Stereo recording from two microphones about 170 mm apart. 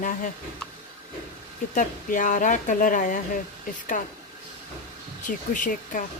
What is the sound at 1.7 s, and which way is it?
Speech, 50° left (ahead or behind).